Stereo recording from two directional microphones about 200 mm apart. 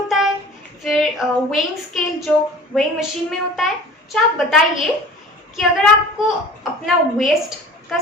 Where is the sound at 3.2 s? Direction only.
Centre (ahead or behind).